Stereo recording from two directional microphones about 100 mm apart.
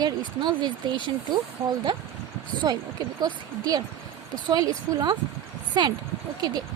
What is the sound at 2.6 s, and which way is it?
Speech, 40° right (ahead or behind).